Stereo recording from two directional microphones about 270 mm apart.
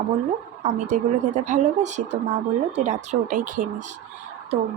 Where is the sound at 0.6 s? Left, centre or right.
Right.